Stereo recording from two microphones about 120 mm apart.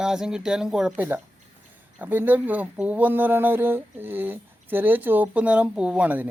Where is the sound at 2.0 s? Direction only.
15° right (ahead or behind).